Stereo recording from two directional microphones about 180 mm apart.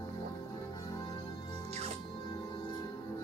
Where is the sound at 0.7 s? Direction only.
20° left (ahead or behind).